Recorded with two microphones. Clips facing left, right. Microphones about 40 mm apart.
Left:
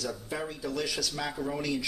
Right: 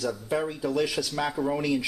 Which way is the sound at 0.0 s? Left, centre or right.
Centre.